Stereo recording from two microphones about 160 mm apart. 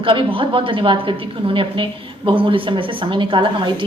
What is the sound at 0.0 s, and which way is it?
A woman's voice, 35° right (ahead or behind).